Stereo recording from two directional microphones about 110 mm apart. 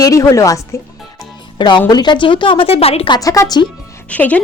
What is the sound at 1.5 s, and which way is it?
Speech, 45° left (ahead or behind).